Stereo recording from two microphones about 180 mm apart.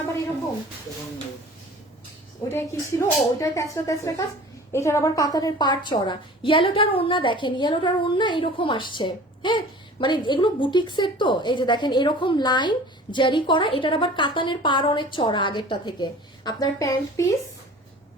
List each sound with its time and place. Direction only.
2.5 s a woman's voice: 15° left (ahead or behind)